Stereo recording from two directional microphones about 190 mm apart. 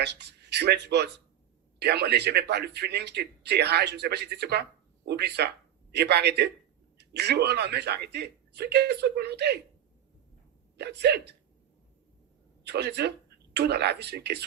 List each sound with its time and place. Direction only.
0.0 s speech: 60° right (ahead or behind)
10.8 s speech: 60° right (ahead or behind)
12.6 s speech: 60° right (ahead or behind)